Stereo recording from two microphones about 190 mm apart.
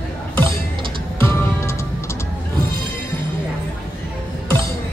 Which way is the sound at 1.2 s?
10° left (ahead or behind).